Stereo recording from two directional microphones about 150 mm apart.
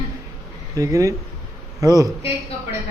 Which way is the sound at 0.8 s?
20° right (ahead or behind).